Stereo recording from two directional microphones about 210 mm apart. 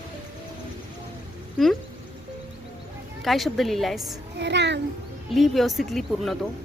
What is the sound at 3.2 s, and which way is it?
Speech, centre (ahead or behind).